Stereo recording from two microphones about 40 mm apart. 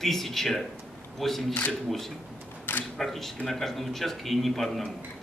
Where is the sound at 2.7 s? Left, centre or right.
Left.